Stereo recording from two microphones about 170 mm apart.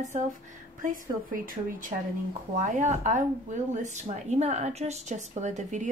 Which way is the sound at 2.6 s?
45° right (ahead or behind).